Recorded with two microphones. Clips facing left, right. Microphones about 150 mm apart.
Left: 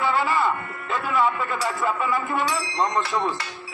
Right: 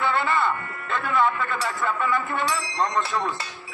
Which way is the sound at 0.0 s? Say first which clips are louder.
Left 1 dB; 5° left (ahead or behind).